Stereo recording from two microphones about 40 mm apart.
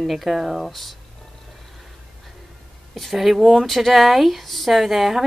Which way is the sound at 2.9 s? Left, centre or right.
Centre.